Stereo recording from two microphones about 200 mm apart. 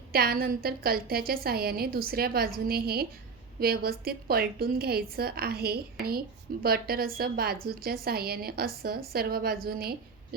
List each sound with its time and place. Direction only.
0.1 s a woman's voice: 50° right (ahead or behind)